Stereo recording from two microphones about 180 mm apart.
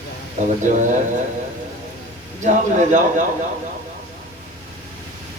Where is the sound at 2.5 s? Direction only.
45° right (ahead or behind).